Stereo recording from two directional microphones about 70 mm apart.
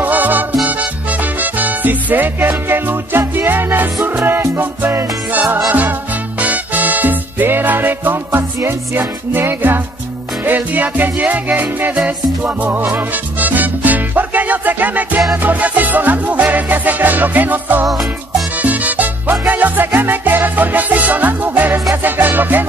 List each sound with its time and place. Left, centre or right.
0.0 s music: right
18.6 s salsa music: right
19.4 s music: right